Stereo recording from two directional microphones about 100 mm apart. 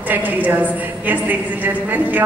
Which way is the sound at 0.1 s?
15° right (ahead or behind).